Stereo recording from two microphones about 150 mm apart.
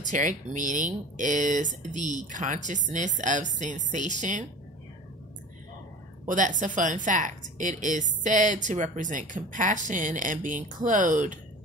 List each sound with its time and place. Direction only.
0.0 s a woman's voice: 60° right (ahead or behind)
6.2 s a woman's voice: 60° right (ahead or behind)